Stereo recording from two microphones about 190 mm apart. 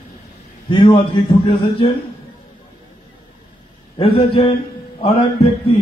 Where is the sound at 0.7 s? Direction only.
25° left (ahead or behind).